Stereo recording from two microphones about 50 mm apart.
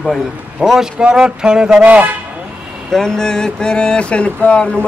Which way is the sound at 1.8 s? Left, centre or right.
Right.